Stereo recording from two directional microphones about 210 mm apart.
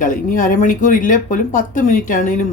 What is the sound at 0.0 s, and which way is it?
Speech, 40° left (ahead or behind).